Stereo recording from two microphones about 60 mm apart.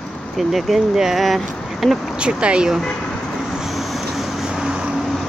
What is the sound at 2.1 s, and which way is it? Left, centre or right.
Speech, centre.